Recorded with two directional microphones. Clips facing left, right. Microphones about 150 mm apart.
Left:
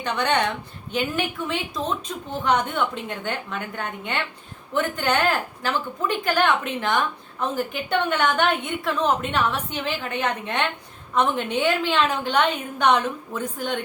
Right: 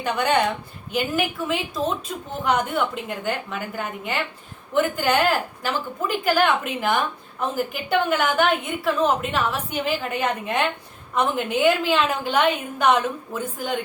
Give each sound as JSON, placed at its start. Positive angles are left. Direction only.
{"t": 0.0, "sound": "a woman's voice", "side_deg": -5}